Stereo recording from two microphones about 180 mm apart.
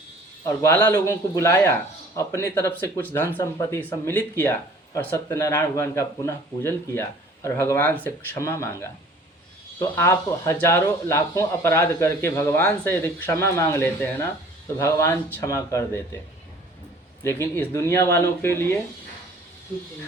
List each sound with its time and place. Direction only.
0.4 s speech: 15° left (ahead or behind)
17.2 s speech: 15° left (ahead or behind)